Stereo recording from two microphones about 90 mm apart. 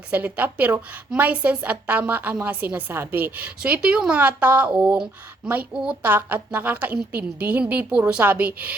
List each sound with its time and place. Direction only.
0.1 s a woman's voice: 20° right (ahead or behind)